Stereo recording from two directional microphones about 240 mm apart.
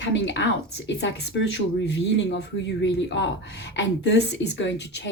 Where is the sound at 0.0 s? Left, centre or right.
Left.